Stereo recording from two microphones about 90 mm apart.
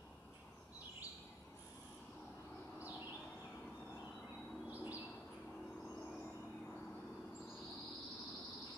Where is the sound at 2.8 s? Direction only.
20° right (ahead or behind).